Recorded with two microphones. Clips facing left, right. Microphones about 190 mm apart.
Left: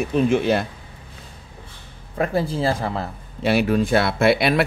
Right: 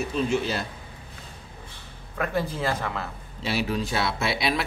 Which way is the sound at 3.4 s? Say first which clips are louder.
Left 8 dB; 55° left (ahead or behind).